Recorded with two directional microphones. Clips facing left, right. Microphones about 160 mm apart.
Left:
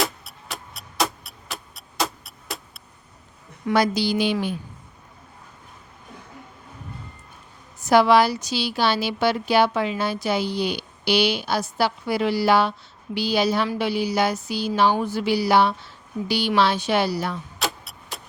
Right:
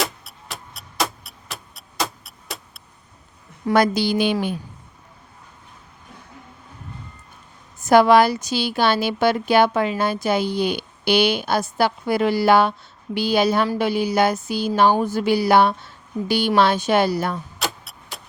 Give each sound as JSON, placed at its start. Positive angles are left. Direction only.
{"t": 0.0, "sound": "music", "side_deg": 0}
{"t": 3.7, "sound": "speech", "side_deg": -55}
{"t": 7.8, "sound": "speech", "side_deg": -50}
{"t": 17.6, "sound": "a sound", "side_deg": 0}